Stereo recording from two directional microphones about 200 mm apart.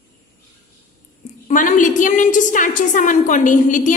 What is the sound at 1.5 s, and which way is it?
A woman's voice, 40° left (ahead or behind).